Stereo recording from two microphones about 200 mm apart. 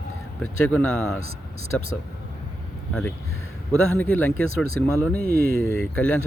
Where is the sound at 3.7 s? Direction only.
10° left (ahead or behind).